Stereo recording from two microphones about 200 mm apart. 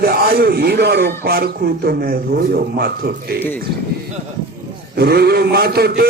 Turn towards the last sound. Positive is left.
turn(degrees=-50)  # may be behind; listen again after turning